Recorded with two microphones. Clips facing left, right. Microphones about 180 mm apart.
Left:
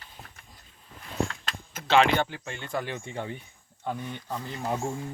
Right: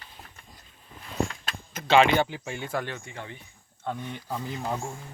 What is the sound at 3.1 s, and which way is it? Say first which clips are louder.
Speech: left 6 dB; 30° left (ahead or behind).